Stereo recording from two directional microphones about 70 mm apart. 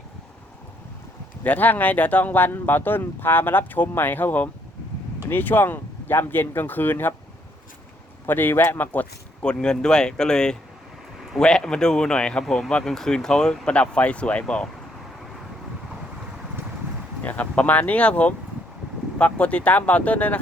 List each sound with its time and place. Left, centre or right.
1.5 s speech: left
8.3 s speech: left
9.4 s speech: centre
17.2 s speech: left